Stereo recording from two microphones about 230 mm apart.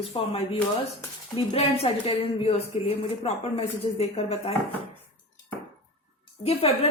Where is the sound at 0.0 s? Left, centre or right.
Left.